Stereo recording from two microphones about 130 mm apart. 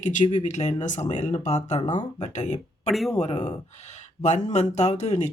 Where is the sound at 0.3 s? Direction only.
60° left (ahead or behind).